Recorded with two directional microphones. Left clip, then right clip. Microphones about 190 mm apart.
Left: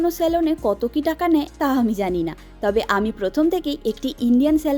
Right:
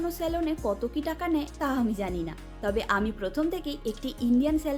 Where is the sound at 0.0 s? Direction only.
45° left (ahead or behind).